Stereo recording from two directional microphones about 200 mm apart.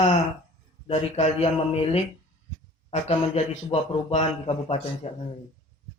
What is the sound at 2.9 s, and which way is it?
A man's voice, 30° left (ahead or behind).